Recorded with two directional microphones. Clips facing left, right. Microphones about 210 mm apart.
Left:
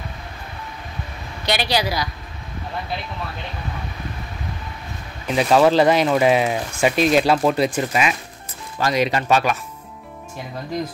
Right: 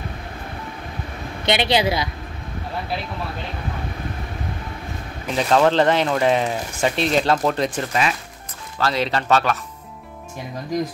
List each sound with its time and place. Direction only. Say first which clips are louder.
1.4 s a woman's voice: right 3 dB; 25° right (ahead or behind)
5.3 s speech: left 2 dB; 10° left (ahead or behind)